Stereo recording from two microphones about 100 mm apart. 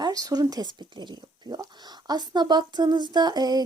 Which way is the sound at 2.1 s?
45° right (ahead or behind).